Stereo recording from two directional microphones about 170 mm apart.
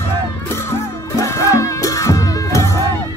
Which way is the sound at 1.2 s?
15° left (ahead or behind).